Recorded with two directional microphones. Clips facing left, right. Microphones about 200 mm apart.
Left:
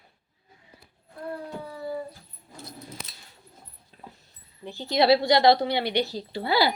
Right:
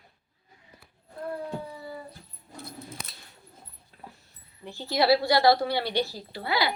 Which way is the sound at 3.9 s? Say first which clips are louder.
Left 1 dB; 25° left (ahead or behind).